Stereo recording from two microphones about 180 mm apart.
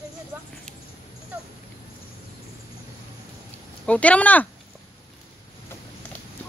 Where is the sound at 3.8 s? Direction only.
5° left (ahead or behind).